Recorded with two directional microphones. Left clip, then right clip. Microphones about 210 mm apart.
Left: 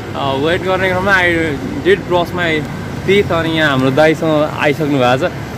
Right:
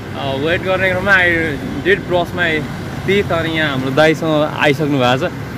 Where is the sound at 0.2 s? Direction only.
15° left (ahead or behind).